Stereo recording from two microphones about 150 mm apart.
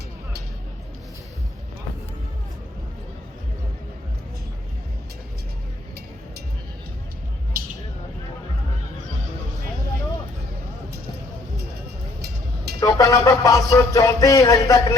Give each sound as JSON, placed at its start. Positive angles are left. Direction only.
{"t": 12.8, "sound": "music", "side_deg": 25}